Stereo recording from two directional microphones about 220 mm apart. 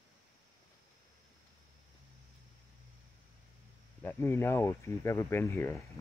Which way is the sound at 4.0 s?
10° left (ahead or behind).